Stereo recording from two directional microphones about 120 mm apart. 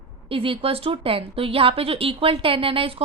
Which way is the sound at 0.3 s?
50° right (ahead or behind).